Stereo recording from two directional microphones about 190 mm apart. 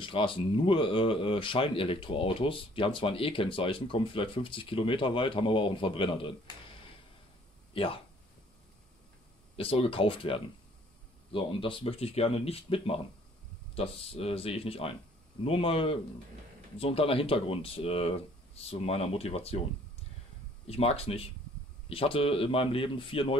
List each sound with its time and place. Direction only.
0.0 s speech: 25° left (ahead or behind)
7.7 s speech: 30° left (ahead or behind)
9.6 s speech: 30° left (ahead or behind)
20.6 s speech: 30° left (ahead or behind)